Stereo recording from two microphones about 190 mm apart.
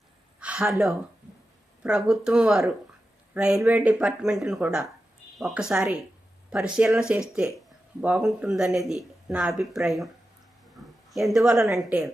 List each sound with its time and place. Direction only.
0.3 s a sound: 5° right (ahead or behind)
1.8 s speech: 5° right (ahead or behind)
11.1 s a woman's voice: centre (ahead or behind)